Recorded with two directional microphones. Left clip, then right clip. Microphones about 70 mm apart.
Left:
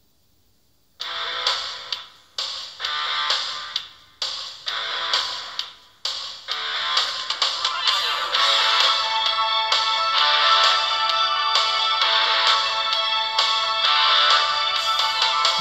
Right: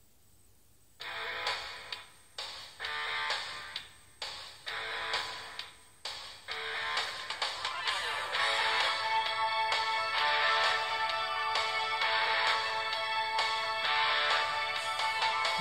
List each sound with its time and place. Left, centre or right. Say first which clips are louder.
0.9 s music: left 11 dB; left